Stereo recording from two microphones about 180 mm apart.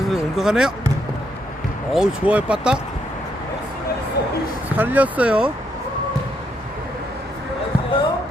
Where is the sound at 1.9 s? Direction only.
5° right (ahead or behind).